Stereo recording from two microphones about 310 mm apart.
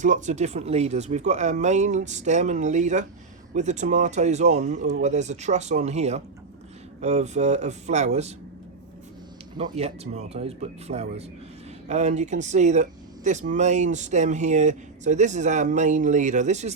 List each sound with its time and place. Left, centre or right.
0.0 s speech: right
9.6 s speech: centre